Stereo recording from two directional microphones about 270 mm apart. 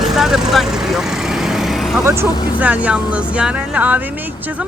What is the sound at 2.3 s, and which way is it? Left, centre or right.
Speech, centre.